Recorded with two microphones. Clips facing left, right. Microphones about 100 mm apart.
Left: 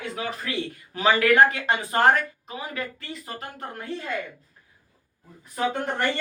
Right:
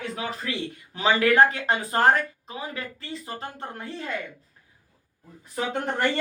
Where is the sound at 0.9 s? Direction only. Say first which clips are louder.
Left 1 dB; 25° right (ahead or behind).